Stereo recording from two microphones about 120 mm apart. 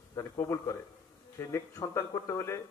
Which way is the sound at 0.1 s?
25° left (ahead or behind).